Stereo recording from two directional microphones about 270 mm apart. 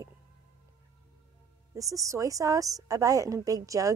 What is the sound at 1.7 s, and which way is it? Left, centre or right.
A woman's voice, centre.